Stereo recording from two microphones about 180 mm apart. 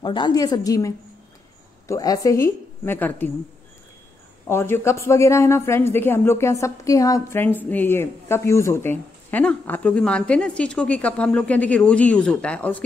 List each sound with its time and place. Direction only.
0.0 s a woman's voice: 25° left (ahead or behind); by 3.3 s 10° left (ahead or behind)
4.5 s speech: 15° left (ahead or behind)